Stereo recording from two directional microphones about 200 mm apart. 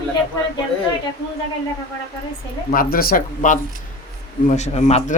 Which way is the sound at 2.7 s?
45° left (ahead or behind).